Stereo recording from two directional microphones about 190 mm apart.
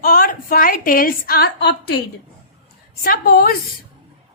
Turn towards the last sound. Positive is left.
turn(degrees=50)  # may be behind; listen again after turning